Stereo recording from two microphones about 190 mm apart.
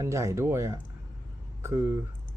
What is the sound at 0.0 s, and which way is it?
Speech, 15° right (ahead or behind).